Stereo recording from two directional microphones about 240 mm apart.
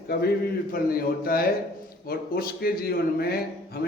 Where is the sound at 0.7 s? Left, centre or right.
Left.